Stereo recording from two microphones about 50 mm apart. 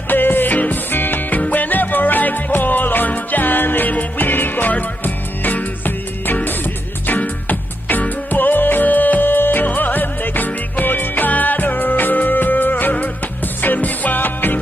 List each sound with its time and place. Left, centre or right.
0.1 s music: left